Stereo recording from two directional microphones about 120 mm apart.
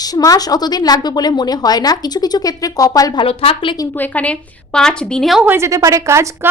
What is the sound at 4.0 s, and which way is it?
A woman's voice, 15° left (ahead or behind).